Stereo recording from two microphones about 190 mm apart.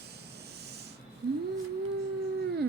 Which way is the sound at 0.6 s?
60° right (ahead or behind).